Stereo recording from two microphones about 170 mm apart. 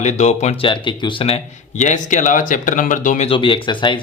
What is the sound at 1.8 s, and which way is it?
Speech, 45° left (ahead or behind).